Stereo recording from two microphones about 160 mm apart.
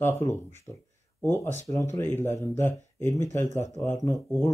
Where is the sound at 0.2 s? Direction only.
15° left (ahead or behind).